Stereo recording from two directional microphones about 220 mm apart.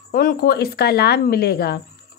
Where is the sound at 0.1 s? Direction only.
40° left (ahead or behind).